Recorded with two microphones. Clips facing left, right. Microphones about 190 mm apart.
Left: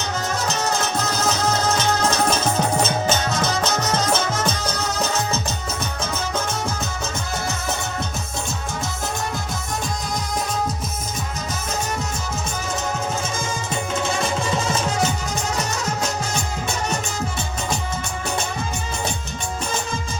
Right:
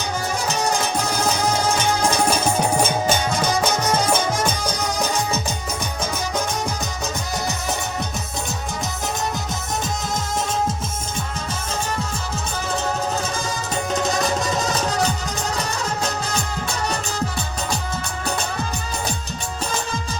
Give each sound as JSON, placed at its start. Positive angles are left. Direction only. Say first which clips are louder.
{"t": 0.4, "sound": "music", "louder": "right 2 dB", "side_deg": -10}
{"t": 14.1, "sound": "music", "louder": "right 1 dB", "side_deg": -40}